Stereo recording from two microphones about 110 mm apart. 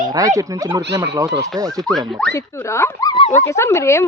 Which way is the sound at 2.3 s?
25° left (ahead or behind).